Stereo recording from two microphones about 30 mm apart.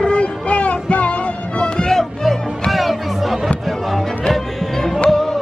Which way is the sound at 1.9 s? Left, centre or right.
Centre.